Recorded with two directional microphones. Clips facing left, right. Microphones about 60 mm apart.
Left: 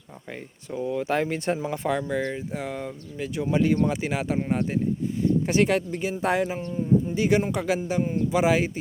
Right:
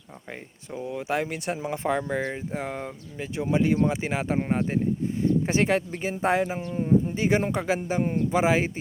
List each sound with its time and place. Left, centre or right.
0.7 s speech: centre
1.5 s speech: right
6.7 s speech: right
7.2 s speech: right